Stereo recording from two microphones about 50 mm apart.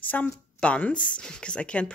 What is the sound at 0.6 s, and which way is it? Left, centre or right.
Speech, left.